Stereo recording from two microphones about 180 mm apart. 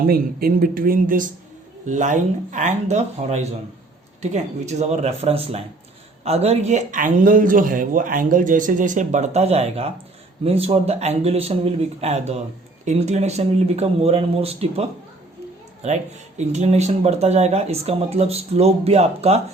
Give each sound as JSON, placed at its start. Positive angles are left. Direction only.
{"t": 0.0, "sound": "a man's voice", "side_deg": -55}
{"t": 16.4, "sound": "speech", "side_deg": -40}